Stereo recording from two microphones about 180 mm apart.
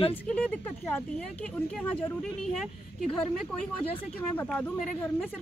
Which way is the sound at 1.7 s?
5° left (ahead or behind).